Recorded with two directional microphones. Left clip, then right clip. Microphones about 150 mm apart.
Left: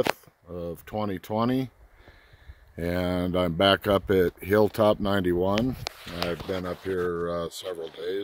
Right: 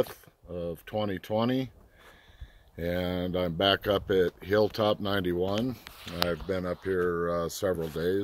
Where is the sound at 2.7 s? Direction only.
65° left (ahead or behind).